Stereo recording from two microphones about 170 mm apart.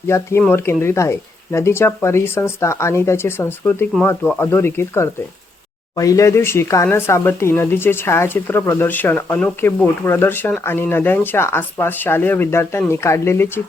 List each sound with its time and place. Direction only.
0.1 s speech: 15° left (ahead or behind)